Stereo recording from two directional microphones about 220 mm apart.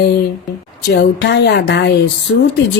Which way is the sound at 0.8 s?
50° left (ahead or behind).